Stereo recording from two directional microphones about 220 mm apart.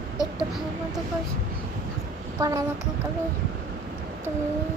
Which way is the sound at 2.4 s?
15° right (ahead or behind).